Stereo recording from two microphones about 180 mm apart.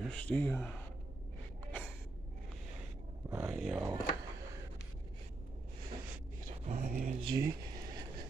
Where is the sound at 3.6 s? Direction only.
Centre (ahead or behind).